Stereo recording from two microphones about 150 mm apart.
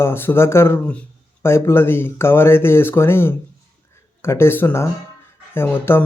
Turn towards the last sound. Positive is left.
turn(degrees=15)  # may be behind; listen again after turning